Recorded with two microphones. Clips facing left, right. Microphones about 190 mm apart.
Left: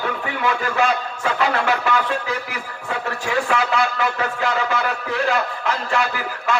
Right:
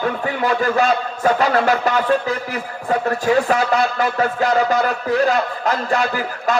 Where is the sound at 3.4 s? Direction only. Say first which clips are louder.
Right 3 dB; 40° right (ahead or behind).